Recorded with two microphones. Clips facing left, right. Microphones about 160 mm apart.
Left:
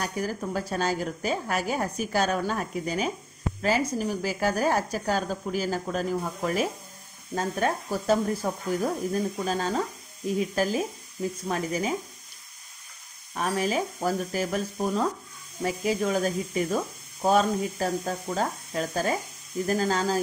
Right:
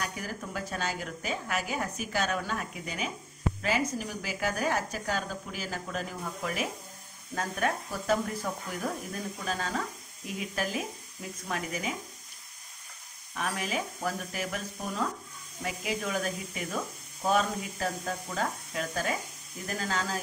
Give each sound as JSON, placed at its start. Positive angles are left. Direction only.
{"t": 0.0, "sound": "a woman's voice", "side_deg": 40}
{"t": 13.3, "sound": "a woman's voice", "side_deg": 35}